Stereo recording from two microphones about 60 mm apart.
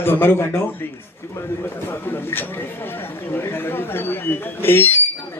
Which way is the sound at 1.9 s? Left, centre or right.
Left.